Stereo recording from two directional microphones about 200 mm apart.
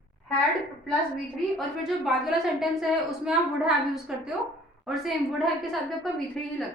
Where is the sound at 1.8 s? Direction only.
Centre (ahead or behind).